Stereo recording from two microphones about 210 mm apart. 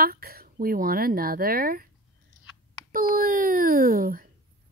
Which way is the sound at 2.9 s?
40° right (ahead or behind).